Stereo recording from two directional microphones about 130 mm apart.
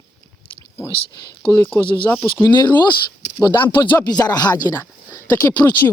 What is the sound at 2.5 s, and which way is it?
Speech, 35° left (ahead or behind).